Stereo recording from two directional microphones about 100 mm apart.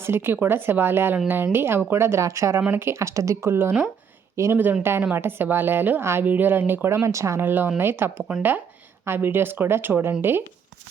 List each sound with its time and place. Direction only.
0.0 s speech: 25° right (ahead or behind)
2.6 s speech: 20° right (ahead or behind)